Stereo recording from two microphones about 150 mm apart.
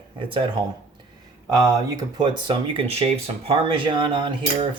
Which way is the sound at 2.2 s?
30° right (ahead or behind).